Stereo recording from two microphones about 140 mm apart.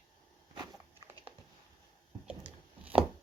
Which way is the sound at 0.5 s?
30° right (ahead or behind).